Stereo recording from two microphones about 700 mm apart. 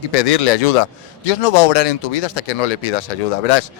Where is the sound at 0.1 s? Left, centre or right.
Left.